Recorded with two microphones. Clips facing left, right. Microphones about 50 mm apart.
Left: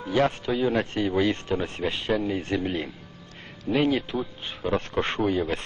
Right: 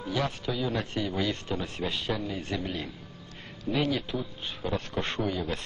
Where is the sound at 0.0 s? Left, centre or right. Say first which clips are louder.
Left 7 dB; left.